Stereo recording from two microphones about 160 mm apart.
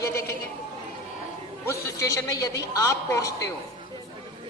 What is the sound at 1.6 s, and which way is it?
A man's voice, 20° left (ahead or behind).